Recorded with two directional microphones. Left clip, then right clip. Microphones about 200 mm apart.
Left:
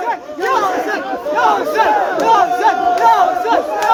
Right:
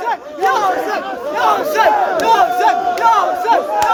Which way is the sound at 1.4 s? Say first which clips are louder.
Right 1 dB; 55° right (ahead or behind).